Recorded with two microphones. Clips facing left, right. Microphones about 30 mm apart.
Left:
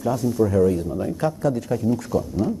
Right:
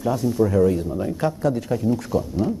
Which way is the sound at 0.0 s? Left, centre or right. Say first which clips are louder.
Even; right.